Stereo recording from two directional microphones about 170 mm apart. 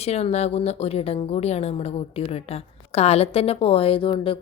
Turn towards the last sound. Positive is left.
turn(degrees=30)  # may be behind; listen again after turning